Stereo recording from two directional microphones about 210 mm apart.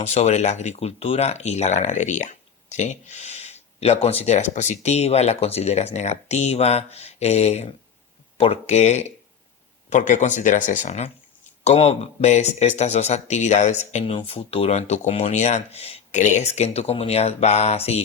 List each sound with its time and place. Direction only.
0.0 s speech: 30° left (ahead or behind)